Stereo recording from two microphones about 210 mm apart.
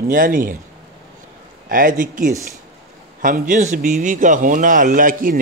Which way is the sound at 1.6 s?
40° right (ahead or behind).